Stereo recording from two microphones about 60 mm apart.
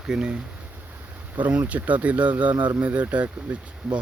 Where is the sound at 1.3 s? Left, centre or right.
Right.